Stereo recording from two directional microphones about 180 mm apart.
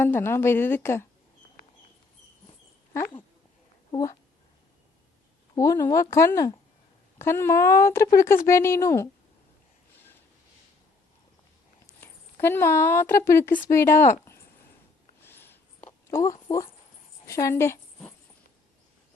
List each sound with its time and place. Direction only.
0.0 s speech: 15° left (ahead or behind)
2.9 s speech: 15° left (ahead or behind)
5.5 s speech: 15° left (ahead or behind)
11.9 s speech: 15° left (ahead or behind)
15.2 s a sound: 10° left (ahead or behind)
17.2 s a woman's voice: 15° left (ahead or behind)